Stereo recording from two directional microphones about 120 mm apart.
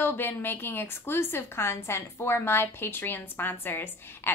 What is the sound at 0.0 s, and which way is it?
A woman's voice, 15° left (ahead or behind).